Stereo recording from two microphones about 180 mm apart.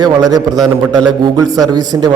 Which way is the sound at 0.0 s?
20° right (ahead or behind).